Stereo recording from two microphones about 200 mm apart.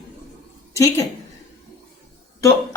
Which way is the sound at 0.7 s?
15° left (ahead or behind).